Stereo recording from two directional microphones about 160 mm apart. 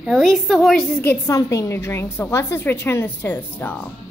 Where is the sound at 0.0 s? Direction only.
Centre (ahead or behind).